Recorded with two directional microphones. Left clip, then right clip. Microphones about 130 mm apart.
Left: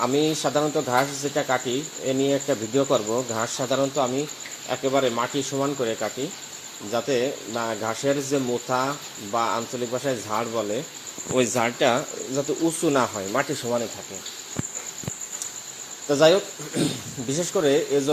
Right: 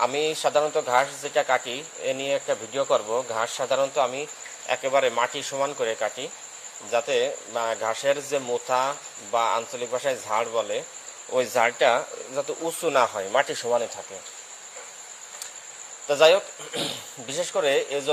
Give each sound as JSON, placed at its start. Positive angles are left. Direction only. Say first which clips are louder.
{"t": 0.0, "sound": "speech", "louder": "left 1 dB", "side_deg": -10}
{"t": 2.3, "sound": "speech", "louder": "left 2 dB", "side_deg": 0}
{"t": 4.7, "sound": "speech", "louder": "right 1 dB", "side_deg": -15}
{"t": 6.9, "sound": "speech", "louder": "right 1 dB", "side_deg": -10}
{"t": 11.9, "sound": "speech", "louder": "even", "side_deg": -5}
{"t": 12.6, "sound": "speech", "louder": "right 1 dB", "side_deg": -20}
{"t": 13.1, "sound": "speech", "louder": "right 2 dB", "side_deg": -40}
{"t": 16.0, "sound": "speech", "louder": "even", "side_deg": -15}